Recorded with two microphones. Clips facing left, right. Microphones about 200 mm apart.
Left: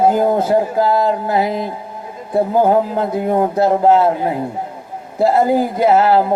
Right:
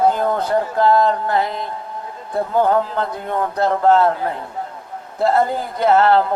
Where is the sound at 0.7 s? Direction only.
5° left (ahead or behind).